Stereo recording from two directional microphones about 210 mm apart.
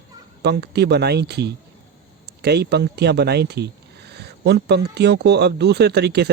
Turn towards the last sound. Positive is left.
turn(degrees=-50)  # may be behind; listen again after turning